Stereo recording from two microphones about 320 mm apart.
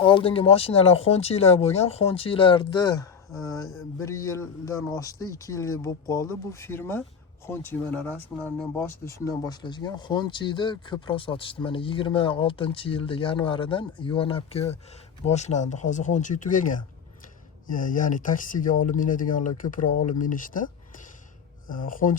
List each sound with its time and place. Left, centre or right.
0.0 s speech: centre
21.7 s speech: left